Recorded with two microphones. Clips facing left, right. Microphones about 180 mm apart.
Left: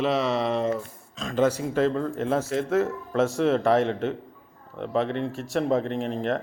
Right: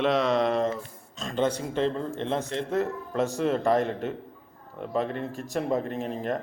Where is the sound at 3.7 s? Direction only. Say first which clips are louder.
Left 3 dB; 90° left.